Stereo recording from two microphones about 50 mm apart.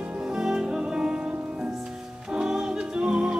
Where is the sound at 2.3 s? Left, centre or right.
Centre.